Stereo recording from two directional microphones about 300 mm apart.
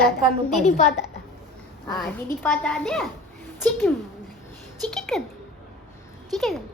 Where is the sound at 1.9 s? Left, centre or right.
Centre.